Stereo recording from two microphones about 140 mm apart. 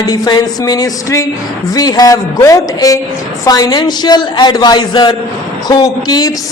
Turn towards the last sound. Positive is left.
turn(degrees=25)  # may be behind; listen again after turning